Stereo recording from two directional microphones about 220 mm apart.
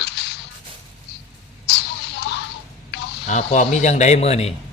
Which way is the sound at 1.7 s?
50° left (ahead or behind).